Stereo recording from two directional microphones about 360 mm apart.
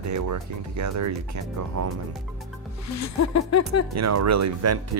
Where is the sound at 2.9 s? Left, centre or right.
Left.